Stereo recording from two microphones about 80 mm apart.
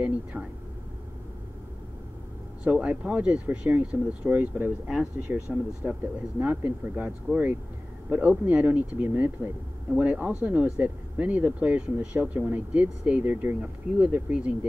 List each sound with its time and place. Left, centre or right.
0.0 s speech: centre
2.6 s speech: centre